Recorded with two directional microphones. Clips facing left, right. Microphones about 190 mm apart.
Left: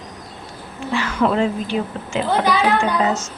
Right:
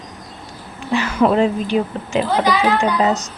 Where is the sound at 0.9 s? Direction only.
20° right (ahead or behind).